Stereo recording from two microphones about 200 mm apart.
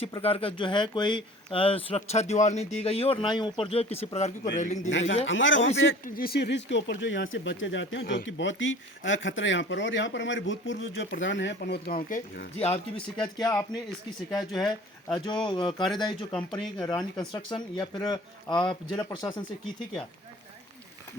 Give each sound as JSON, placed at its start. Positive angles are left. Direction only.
{"t": 0.0, "sound": "speech", "side_deg": 30}
{"t": 4.9, "sound": "speech", "side_deg": 65}
{"t": 6.1, "sound": "speech", "side_deg": 45}
{"t": 11.9, "sound": "speech", "side_deg": 35}
{"t": 13.4, "sound": "speech", "side_deg": 15}
{"t": 15.1, "sound": "speech", "side_deg": 20}